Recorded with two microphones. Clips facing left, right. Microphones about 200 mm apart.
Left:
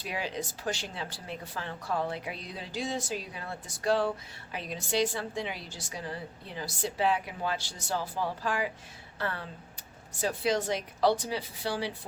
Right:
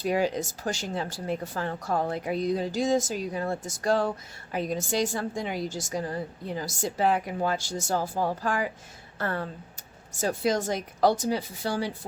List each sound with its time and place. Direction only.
0.0 s a woman's voice: 45° right (ahead or behind)